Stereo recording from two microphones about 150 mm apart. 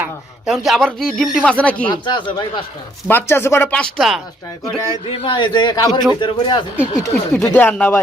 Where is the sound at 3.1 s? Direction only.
15° left (ahead or behind).